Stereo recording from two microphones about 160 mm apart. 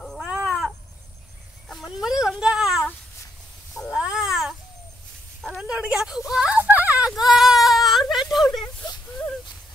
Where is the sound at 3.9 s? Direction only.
5° right (ahead or behind).